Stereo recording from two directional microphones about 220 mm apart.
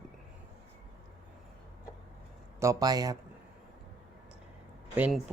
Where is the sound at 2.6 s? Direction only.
15° right (ahead or behind).